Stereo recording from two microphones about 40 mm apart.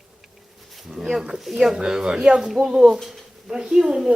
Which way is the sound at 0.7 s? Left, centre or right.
Centre.